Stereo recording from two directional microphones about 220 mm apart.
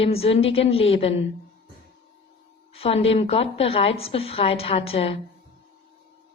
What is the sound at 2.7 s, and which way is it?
Speech, 25° left (ahead or behind).